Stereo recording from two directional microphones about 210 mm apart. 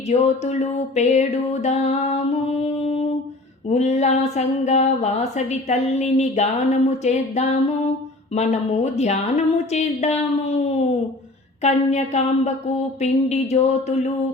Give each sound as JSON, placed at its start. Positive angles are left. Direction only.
{"t": 0.1, "sound": "speech", "side_deg": 30}